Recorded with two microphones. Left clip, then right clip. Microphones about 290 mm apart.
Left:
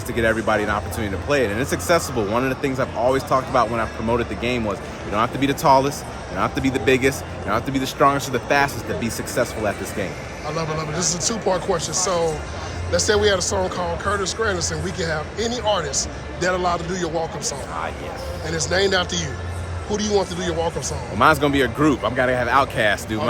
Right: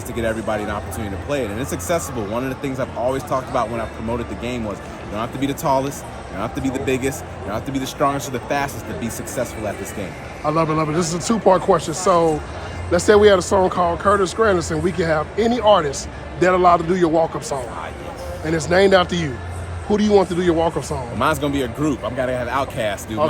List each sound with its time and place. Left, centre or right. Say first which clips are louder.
0.2 s speech: left 3 dB; centre
10.4 s speech: right 7 dB; right
18.4 s speech: right 5 dB; right
21.2 s speech: left 4 dB; centre